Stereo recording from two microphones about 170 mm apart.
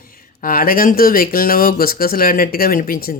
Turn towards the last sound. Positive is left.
turn(degrees=60)  # may be behind; listen again after turning